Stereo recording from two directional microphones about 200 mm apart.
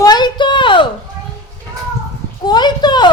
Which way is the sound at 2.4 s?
20° left (ahead or behind).